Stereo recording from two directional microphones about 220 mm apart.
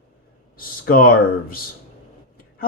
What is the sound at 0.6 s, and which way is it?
Speech, 40° left (ahead or behind).